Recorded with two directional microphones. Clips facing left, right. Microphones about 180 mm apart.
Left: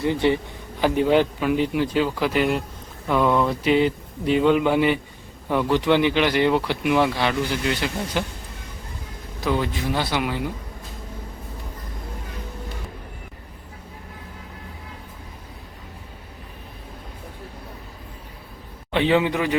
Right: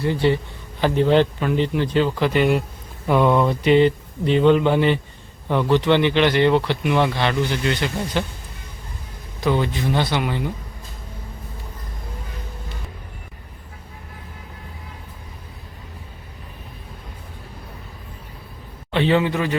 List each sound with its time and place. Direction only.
0.0 s a man's voice: 20° left (ahead or behind)
9.4 s speech: 5° left (ahead or behind)
18.9 s a man's voice: 15° left (ahead or behind)